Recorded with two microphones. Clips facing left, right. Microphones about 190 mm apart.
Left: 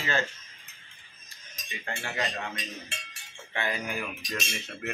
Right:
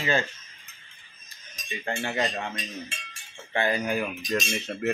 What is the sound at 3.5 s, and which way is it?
Speech, 35° right (ahead or behind).